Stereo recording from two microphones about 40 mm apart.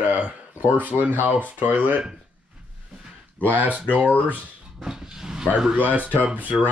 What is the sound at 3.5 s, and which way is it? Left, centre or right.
Speech, right.